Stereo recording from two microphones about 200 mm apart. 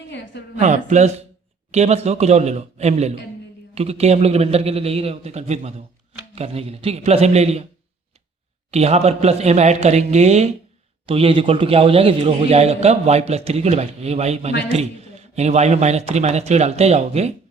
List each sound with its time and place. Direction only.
0.1 s a sound: 60° left (ahead or behind)
0.6 s a man's voice: 35° right (ahead or behind)
8.7 s a man's voice: 30° right (ahead or behind)